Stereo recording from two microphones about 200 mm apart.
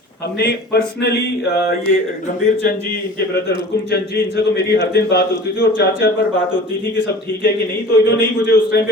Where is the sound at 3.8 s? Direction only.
55° left (ahead or behind).